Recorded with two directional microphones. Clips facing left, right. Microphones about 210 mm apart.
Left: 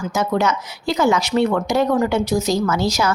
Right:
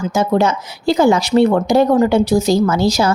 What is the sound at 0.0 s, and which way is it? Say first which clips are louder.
Speech: right 4 dB; 30° right (ahead or behind).